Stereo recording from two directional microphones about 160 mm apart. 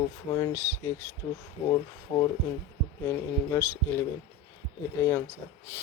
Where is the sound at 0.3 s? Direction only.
20° left (ahead or behind).